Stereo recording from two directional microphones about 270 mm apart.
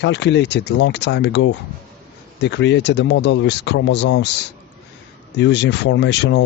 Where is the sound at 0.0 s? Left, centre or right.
Left.